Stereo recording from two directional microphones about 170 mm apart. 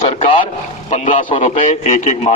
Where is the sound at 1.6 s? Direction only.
45° left (ahead or behind).